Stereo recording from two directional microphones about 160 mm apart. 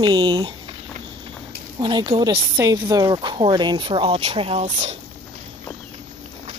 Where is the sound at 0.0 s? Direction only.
25° right (ahead or behind).